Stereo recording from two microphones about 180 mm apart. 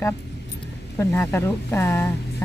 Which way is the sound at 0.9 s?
15° left (ahead or behind).